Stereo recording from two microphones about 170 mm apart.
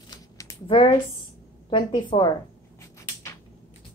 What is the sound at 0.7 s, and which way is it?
A woman's voice, 30° left (ahead or behind).